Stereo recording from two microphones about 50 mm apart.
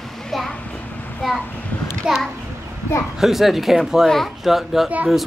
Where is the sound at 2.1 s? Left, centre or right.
Centre.